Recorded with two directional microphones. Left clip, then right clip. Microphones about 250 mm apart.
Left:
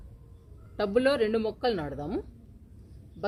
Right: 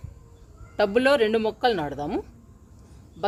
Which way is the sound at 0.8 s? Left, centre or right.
Right.